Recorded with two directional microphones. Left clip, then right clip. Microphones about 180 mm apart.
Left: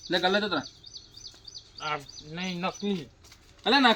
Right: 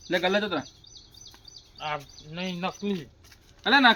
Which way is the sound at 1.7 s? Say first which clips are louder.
Even; 75° right (ahead or behind).